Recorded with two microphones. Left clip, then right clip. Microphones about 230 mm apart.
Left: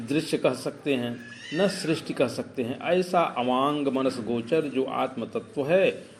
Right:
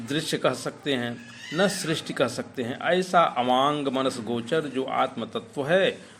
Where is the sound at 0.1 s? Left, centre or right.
Right.